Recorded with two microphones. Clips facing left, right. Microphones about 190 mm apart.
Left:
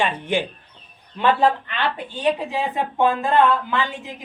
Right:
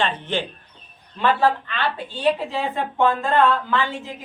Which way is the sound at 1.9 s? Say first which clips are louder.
Right 2 dB; 15° left (ahead or behind).